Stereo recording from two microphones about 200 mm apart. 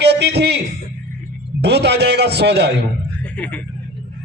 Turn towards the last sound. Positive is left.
turn(degrees=5)  # may be behind; listen again after turning